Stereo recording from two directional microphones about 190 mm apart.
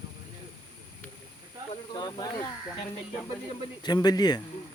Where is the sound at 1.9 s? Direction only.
20° left (ahead or behind).